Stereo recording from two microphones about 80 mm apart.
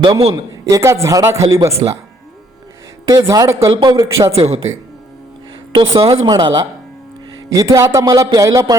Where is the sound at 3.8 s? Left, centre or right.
Right.